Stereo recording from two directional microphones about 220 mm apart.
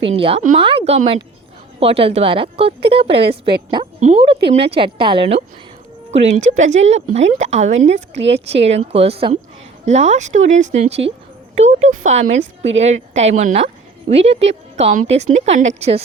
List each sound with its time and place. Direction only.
0.1 s a woman's voice: 25° right (ahead or behind)